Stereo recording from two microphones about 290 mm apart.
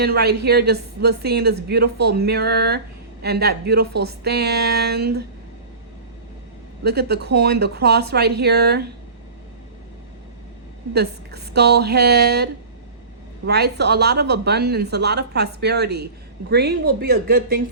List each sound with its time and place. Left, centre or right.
0.0 s a woman's voice: right
6.8 s a woman's voice: right
10.9 s a woman's voice: right